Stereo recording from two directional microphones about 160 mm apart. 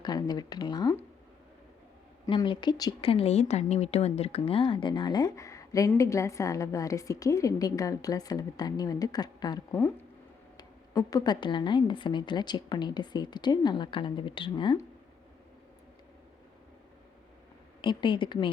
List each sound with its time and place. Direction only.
0.0 s a woman's voice: 25° left (ahead or behind)
2.2 s a woman's voice: 30° left (ahead or behind)
3.0 s a woman's voice: 35° left (ahead or behind)
17.7 s a woman's voice: 30° left (ahead or behind)